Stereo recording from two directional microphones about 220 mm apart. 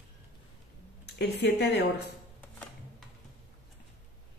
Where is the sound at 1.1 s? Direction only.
50° left (ahead or behind).